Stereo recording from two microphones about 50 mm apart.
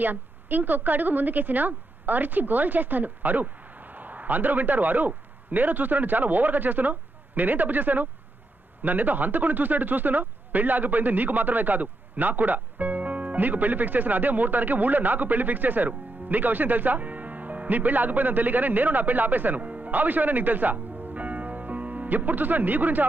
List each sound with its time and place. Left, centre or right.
0.0 s a woman's voice: right